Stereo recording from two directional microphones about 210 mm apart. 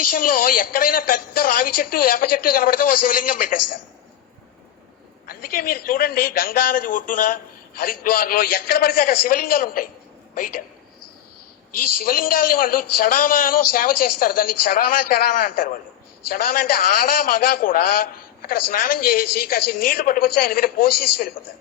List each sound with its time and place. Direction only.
0.2 s a man's voice: 40° left (ahead or behind)
5.3 s a man's voice: 45° left (ahead or behind)
12.0 s a man's voice: 40° left (ahead or behind)